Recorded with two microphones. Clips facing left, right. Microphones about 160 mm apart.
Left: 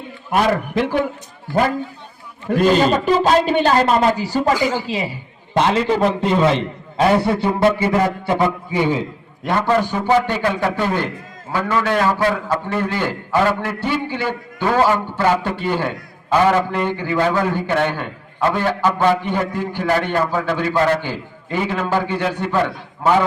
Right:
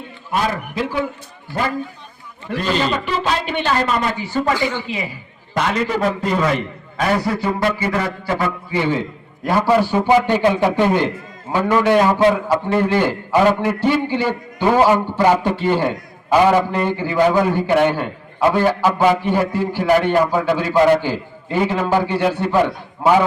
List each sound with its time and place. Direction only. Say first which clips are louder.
2.5 s a man's voice: left 5 dB; 45° left (ahead or behind); by 9.0 s 15° left (ahead or behind)
9.4 s a man's voice: right 2 dB; 5° right (ahead or behind)